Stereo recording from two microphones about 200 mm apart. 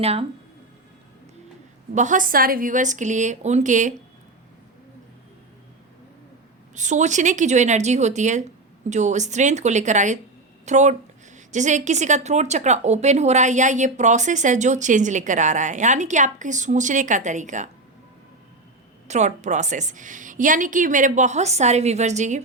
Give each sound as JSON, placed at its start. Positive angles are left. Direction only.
{"t": 0.0, "sound": "a woman's voice", "side_deg": -30}
{"t": 1.9, "sound": "a woman's voice", "side_deg": -40}
{"t": 6.7, "sound": "a woman's voice", "side_deg": -35}
{"t": 19.0, "sound": "a woman's voice", "side_deg": -35}